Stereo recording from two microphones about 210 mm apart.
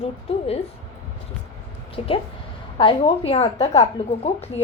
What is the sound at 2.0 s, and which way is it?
A woman's voice, 30° left (ahead or behind).